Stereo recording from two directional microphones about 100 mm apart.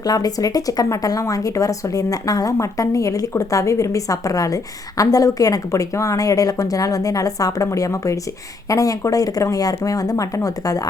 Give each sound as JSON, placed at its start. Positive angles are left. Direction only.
{"t": 0.0, "sound": "speech", "side_deg": 40}